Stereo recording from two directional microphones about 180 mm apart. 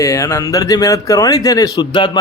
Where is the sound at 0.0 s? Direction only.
15° left (ahead or behind).